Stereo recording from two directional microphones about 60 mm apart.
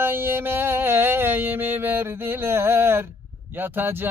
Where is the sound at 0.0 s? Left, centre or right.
Right.